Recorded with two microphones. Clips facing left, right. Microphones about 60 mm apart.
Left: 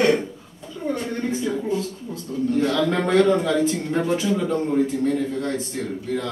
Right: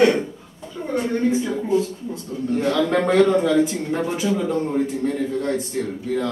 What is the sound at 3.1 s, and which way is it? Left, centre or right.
A man's voice, centre.